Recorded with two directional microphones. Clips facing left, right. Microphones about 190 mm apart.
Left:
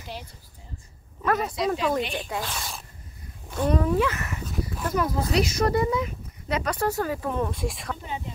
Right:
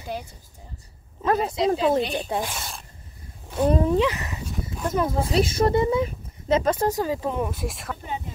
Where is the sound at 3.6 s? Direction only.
30° right (ahead or behind).